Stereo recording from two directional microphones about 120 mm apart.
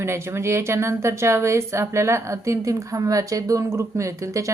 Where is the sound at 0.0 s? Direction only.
20° right (ahead or behind).